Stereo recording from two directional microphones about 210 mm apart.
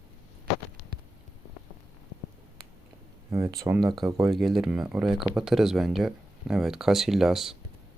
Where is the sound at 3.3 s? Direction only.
15° right (ahead or behind).